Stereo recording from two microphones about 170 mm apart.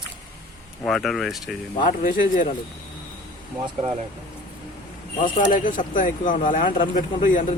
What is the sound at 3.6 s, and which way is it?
Speech, 35° right (ahead or behind).